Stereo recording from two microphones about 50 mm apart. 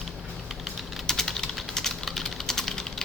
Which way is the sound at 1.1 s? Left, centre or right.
Centre.